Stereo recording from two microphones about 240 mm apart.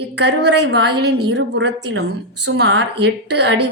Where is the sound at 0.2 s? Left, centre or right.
Right.